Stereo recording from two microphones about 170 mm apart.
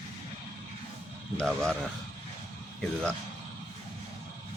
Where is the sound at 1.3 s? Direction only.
5° left (ahead or behind).